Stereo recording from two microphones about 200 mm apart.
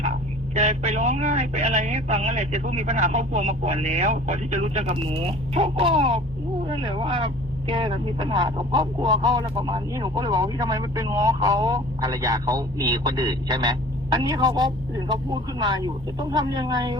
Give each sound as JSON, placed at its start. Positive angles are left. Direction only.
{"t": 0.5, "sound": "speech", "side_deg": -35}